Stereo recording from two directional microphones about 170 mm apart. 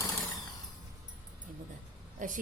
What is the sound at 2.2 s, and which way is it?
Speech, 50° right (ahead or behind).